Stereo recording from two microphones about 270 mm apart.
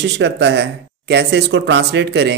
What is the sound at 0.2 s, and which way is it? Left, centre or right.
Speech, right.